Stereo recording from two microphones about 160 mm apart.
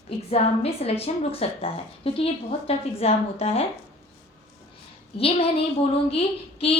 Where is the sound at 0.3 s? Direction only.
40° left (ahead or behind).